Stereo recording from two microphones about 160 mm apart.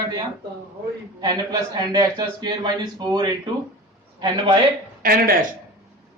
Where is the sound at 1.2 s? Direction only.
25° right (ahead or behind).